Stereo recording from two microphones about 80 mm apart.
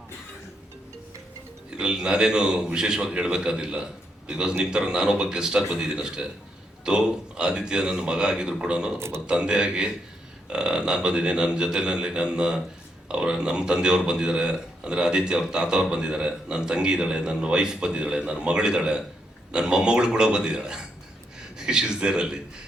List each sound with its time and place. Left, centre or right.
1.8 s speech: centre
9.0 s speech: right
9.2 s speech: centre